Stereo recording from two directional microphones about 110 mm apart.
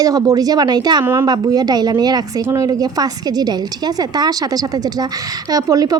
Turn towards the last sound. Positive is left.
turn(degrees=-35)  # may be behind; listen again after turning